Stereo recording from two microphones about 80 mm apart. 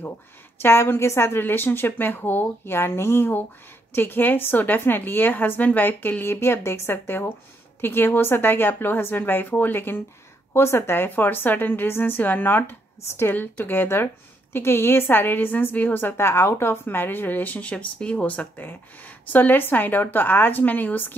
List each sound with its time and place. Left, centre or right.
0.6 s a woman's voice: left